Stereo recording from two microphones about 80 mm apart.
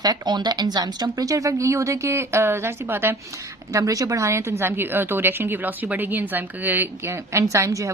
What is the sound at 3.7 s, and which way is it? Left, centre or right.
A woman's voice, right.